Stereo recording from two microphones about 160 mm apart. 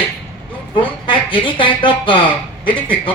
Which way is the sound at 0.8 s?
30° left (ahead or behind).